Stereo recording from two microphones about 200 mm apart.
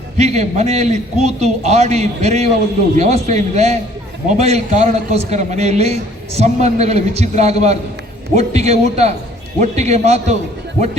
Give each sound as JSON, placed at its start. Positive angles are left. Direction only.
{"t": 0.2, "sound": "a man's voice", "side_deg": -35}